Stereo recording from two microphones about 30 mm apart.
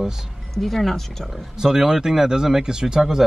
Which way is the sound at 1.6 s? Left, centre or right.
Centre.